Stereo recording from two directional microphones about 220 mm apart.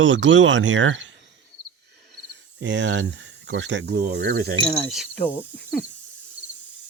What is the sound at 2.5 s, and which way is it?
Speech, 55° right (ahead or behind).